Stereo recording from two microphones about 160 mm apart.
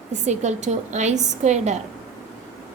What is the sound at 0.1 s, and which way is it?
A woman's voice, 50° right (ahead or behind).